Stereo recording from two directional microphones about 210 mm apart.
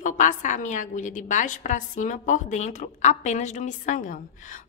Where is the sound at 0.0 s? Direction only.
35° left (ahead or behind).